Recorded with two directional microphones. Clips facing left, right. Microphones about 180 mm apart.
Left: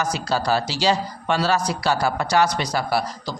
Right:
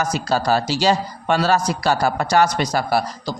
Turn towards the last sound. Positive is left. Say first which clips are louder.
# right 3 dB
turn(degrees=-45)  # may be behind; listen again after turning